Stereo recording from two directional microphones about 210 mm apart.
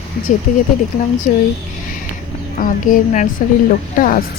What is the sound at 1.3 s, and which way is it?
Speech, 40° left (ahead or behind).